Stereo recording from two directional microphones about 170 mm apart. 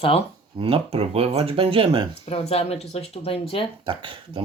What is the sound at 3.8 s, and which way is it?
Speech, 30° right (ahead or behind).